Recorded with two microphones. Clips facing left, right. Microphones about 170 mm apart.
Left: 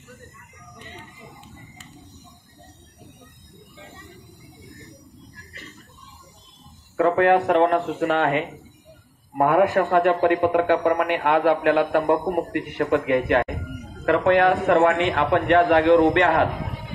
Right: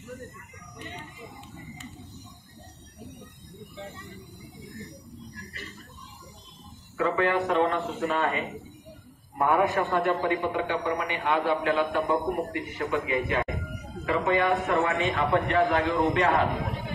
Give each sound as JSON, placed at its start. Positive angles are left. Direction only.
{"t": 7.0, "sound": "a man's voice", "side_deg": 65}
{"t": 14.7, "sound": "a man's voice", "side_deg": 70}